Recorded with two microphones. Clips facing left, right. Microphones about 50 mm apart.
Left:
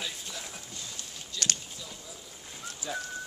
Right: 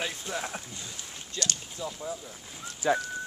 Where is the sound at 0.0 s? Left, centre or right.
Right.